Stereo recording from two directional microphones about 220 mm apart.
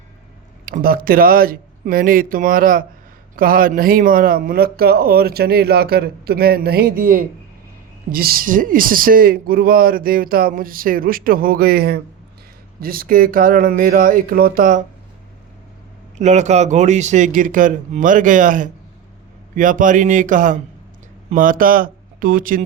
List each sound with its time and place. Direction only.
0.6 s speech: 40° right (ahead or behind)
16.1 s speech: 30° right (ahead or behind)